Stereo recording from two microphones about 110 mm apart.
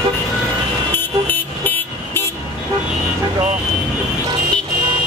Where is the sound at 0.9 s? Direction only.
20° left (ahead or behind).